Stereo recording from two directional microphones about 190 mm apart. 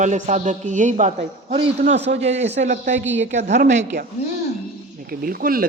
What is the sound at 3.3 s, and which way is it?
Speech, 40° right (ahead or behind).